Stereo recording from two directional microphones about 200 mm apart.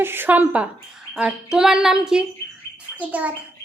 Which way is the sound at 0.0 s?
10° right (ahead or behind).